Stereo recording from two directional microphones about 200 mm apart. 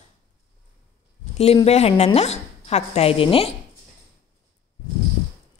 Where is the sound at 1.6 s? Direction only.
30° left (ahead or behind).